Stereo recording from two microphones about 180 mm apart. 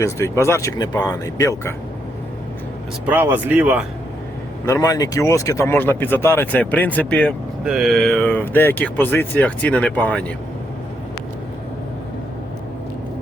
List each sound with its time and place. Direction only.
0.0 s speech: 15° left (ahead or behind)
3.1 s speech: 10° right (ahead or behind)
4.6 s speech: 15° left (ahead or behind)